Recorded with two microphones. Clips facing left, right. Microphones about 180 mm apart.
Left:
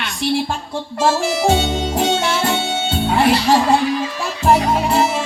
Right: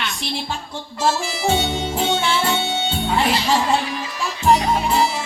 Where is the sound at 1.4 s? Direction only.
55° left (ahead or behind).